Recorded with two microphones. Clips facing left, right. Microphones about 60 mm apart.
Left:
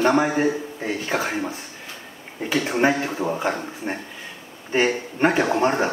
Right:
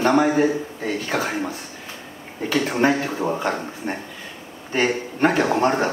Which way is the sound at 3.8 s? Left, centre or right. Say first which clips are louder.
Even; centre.